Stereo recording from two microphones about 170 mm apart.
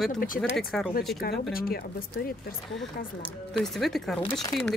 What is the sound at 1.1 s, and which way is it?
Speech, 70° left (ahead or behind).